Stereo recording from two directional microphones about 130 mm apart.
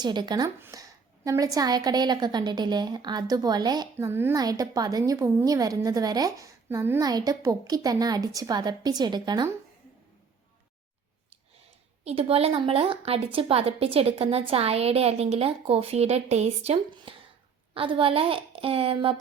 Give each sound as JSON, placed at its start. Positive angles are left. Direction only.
{"t": 0.0, "sound": "a woman's voice", "side_deg": -35}
{"t": 0.6, "sound": "a sound", "side_deg": -25}
{"t": 1.5, "sound": "a woman's voice", "side_deg": -30}
{"t": 3.9, "sound": "a woman's voice", "side_deg": -20}
{"t": 4.4, "sound": "a woman's voice", "side_deg": -30}
{"t": 7.0, "sound": "a woman's voice", "side_deg": -30}
{"t": 12.0, "sound": "a woman's voice", "side_deg": -50}